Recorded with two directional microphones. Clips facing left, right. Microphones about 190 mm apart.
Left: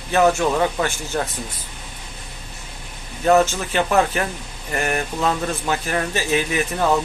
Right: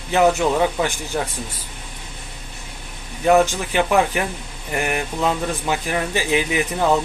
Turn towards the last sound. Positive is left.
turn(degrees=-15)  # may be behind; listen again after turning